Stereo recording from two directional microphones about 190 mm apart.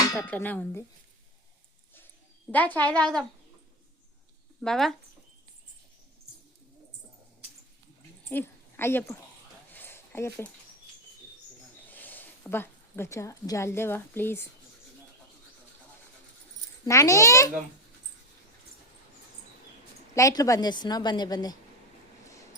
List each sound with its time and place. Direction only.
0.0 s speech: 15° left (ahead or behind)
2.5 s a woman's voice: 10° left (ahead or behind)
4.6 s speech: centre (ahead or behind)
8.3 s a woman's voice: 10° left (ahead or behind)
9.7 s a sound: 10° left (ahead or behind)
11.9 s speech: 10° left (ahead or behind)
16.8 s a woman's voice: 15° left (ahead or behind)
20.1 s a woman's voice: 15° left (ahead or behind)